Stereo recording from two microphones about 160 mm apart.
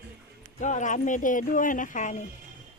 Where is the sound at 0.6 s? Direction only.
50° left (ahead or behind).